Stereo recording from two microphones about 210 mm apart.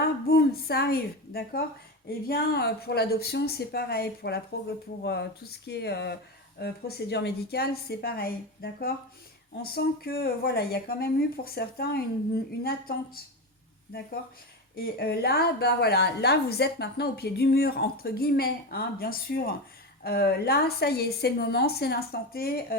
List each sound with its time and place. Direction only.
0.0 s a woman's voice: 45° left (ahead or behind)
14.8 s a woman's voice: 45° left (ahead or behind)